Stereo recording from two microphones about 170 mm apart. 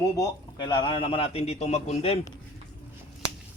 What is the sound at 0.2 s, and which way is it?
A man's voice, 25° left (ahead or behind).